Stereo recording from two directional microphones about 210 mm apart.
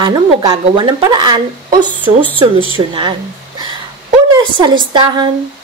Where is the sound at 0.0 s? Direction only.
20° right (ahead or behind).